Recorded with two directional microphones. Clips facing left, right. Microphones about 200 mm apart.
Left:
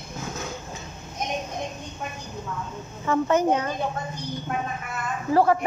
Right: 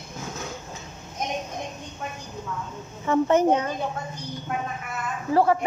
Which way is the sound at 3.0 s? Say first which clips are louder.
Right 2 dB; 25° right (ahead or behind).